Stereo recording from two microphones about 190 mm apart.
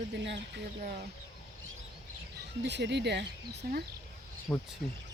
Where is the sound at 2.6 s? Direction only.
65° right (ahead or behind).